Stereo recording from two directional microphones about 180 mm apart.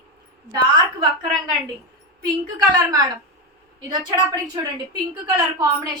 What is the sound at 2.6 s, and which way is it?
Speech, 20° right (ahead or behind).